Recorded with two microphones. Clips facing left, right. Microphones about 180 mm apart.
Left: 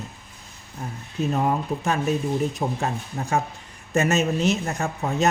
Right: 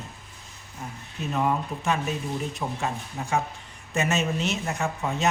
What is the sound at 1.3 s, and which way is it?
Speech, 40° left (ahead or behind).